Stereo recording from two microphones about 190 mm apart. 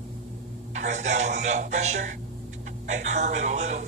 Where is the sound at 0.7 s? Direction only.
40° right (ahead or behind).